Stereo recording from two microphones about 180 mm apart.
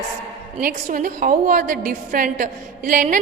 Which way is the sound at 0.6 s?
50° right (ahead or behind).